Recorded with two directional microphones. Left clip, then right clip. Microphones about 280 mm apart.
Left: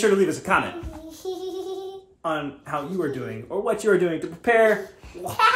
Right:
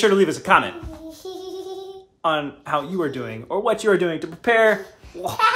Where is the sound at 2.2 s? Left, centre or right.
Centre.